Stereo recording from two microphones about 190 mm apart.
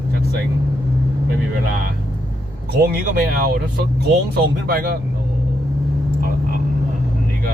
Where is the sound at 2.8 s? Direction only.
50° right (ahead or behind).